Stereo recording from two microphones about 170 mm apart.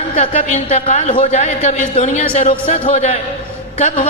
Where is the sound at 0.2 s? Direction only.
45° left (ahead or behind).